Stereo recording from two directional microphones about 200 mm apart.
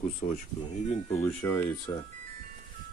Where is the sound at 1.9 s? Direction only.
25° left (ahead or behind).